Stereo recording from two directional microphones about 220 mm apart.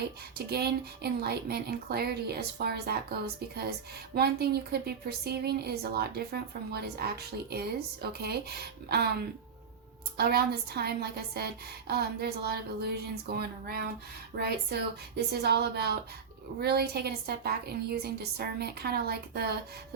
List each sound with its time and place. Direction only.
0.3 s speech: 45° right (ahead or behind)
10.2 s speech: 45° right (ahead or behind)